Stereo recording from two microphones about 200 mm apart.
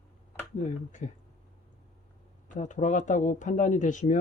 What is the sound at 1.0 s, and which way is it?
Speech, 40° left (ahead or behind).